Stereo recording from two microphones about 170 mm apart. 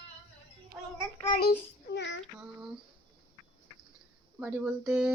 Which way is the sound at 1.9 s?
90° left.